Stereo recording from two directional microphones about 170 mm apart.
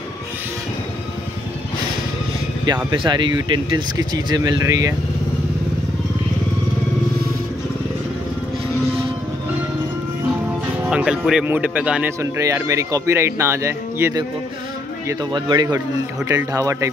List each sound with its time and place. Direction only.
2.6 s speech: 25° right (ahead or behind)
10.2 s speech: 10° right (ahead or behind)
15.0 s speech: 25° right (ahead or behind)